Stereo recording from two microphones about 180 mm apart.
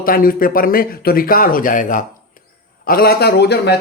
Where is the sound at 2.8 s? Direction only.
60° left (ahead or behind).